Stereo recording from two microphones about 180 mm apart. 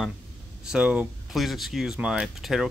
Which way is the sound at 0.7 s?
5° right (ahead or behind).